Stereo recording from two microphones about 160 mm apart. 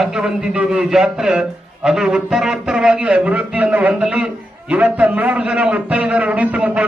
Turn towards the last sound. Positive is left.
turn(degrees=-5)  # may be behind; listen again after turning